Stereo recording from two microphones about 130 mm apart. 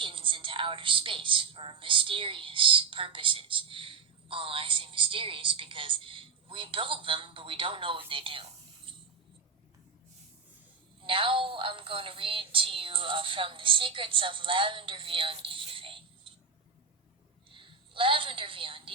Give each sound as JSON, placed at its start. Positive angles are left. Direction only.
{"t": 0.0, "sound": "a woman's voice", "side_deg": -40}
{"t": 11.0, "sound": "a woman's voice", "side_deg": -40}
{"t": 17.5, "sound": "a woman's voice", "side_deg": -40}